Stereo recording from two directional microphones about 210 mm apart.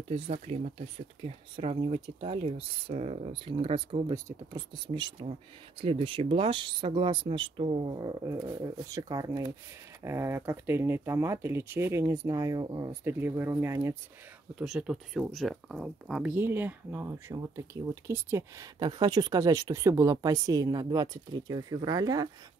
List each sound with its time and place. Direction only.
0.1 s speech: 30° right (ahead or behind)